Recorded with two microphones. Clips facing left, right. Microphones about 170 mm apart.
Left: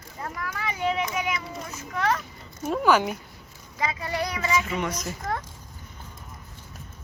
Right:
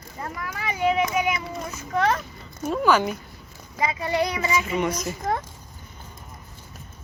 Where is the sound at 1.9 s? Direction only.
25° right (ahead or behind).